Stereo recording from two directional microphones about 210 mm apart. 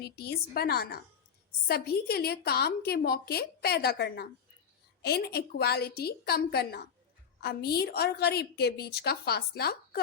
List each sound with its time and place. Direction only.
0.0 s a woman's voice: 50° left (ahead or behind)